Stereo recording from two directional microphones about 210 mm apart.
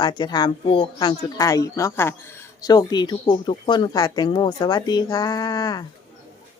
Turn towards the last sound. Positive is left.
turn(degrees=20)  # may be behind; listen again after turning